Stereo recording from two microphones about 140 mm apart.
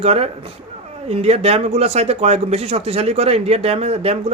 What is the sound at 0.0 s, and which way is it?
Speech, 45° right (ahead or behind).